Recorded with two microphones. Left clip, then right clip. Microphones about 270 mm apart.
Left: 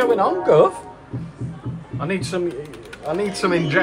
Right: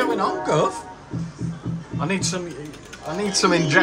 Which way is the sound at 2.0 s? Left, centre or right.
Centre.